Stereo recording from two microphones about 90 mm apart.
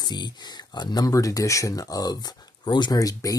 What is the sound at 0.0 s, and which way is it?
Speech, 50° left (ahead or behind).